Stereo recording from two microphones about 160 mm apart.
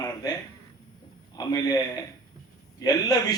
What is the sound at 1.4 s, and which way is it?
A man's voice, 20° left (ahead or behind).